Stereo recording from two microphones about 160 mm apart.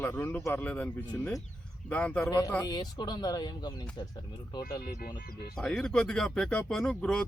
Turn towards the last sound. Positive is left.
turn(degrees=5)  # may be behind; listen again after turning